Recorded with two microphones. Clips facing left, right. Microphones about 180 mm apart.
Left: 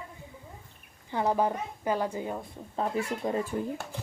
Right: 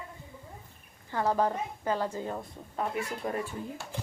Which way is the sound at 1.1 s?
15° left (ahead or behind).